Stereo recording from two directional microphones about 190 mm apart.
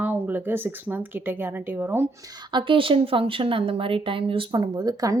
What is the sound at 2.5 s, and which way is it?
Speech, 25° right (ahead or behind).